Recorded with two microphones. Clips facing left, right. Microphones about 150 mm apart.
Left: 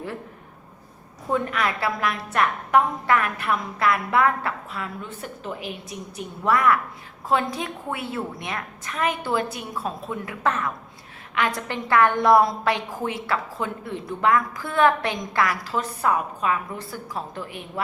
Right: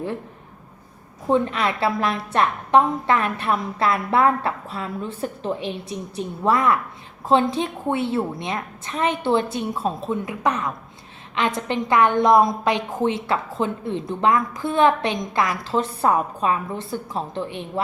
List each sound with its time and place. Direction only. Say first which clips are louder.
1.3 s a woman's voice: right 4 dB; 25° right (ahead or behind)